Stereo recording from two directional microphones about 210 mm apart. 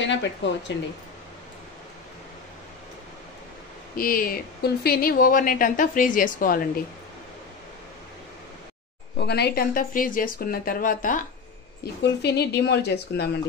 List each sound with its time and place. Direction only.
0.0 s speech: 60° left (ahead or behind)
3.9 s a woman's voice: 45° left (ahead or behind)
9.2 s speech: 50° left (ahead or behind)
11.8 s speech: 50° left (ahead or behind)